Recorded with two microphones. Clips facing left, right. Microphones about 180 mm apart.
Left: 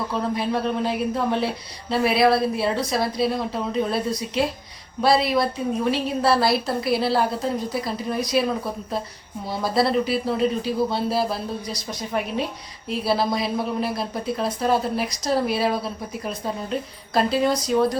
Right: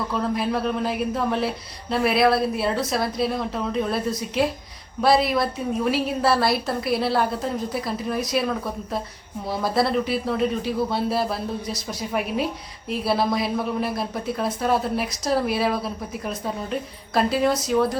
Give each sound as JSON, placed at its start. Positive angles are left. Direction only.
{"t": 0.1, "sound": "a woman's voice", "side_deg": 0}
{"t": 17.2, "sound": "a woman's voice", "side_deg": 0}